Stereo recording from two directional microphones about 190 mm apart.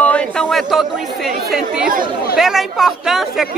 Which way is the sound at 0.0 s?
5° left (ahead or behind).